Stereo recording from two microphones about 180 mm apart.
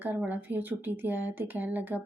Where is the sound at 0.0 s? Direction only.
10° right (ahead or behind).